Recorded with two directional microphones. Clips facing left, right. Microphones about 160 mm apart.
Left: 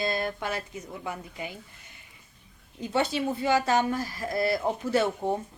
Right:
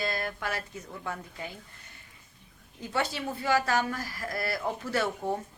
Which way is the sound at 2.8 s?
20° left (ahead or behind).